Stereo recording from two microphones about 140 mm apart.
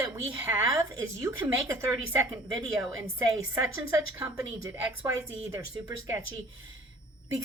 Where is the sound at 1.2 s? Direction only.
20° right (ahead or behind).